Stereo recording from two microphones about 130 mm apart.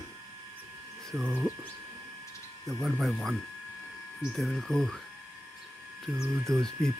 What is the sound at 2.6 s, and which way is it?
Speech, centre (ahead or behind).